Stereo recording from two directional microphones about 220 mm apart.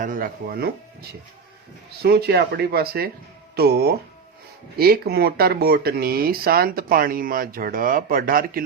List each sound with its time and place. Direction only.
0.0 s speech: 40° right (ahead or behind)
2.0 s speech: 45° right (ahead or behind)